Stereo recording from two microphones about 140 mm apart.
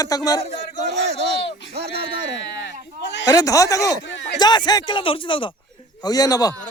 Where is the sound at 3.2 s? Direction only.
25° left (ahead or behind).